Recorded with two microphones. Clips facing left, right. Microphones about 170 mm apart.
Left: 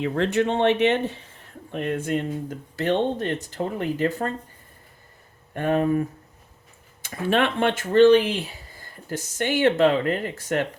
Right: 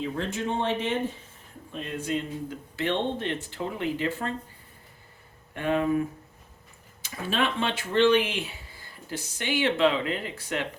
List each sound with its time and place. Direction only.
0.0 s speech: 70° left (ahead or behind)
1.7 s speech: 60° left (ahead or behind); by 4.3 s 45° left (ahead or behind)
5.5 s speech: 45° left (ahead or behind)
7.0 s speech: 55° left (ahead or behind)